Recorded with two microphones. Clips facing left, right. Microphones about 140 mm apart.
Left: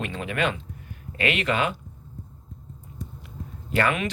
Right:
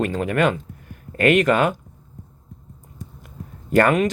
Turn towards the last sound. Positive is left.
turn(degrees=-45)  # may be behind; listen again after turning